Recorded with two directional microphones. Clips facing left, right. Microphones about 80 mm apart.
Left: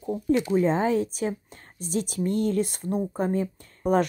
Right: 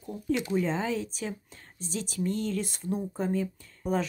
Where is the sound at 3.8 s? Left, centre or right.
Left.